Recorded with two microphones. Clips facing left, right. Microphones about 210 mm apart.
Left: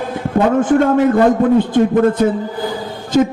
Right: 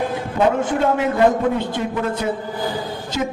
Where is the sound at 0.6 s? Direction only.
50° left (ahead or behind).